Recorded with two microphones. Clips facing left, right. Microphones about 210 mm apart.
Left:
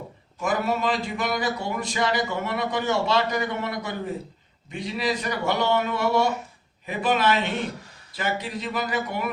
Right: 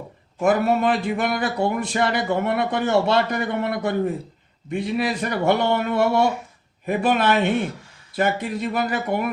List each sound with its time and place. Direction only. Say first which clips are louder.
0.4 s speech: right 6 dB; 55° right (ahead or behind)